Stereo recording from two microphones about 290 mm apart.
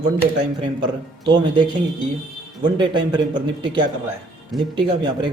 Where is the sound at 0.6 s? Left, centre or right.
Centre.